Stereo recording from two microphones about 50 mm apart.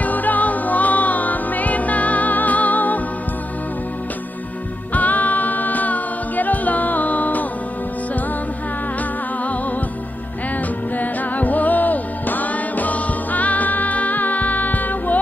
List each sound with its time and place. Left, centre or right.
0.0 s music: left
4.9 s a capella: left
11.0 s music: left